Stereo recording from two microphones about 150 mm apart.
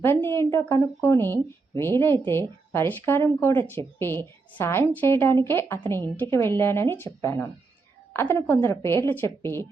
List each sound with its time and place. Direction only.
0.0 s speech: 15° left (ahead or behind)